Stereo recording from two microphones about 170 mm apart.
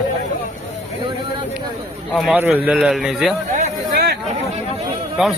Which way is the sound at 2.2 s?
5° right (ahead or behind).